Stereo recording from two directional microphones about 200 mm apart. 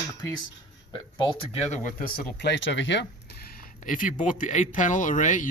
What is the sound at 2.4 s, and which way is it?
Speech, 65° left (ahead or behind).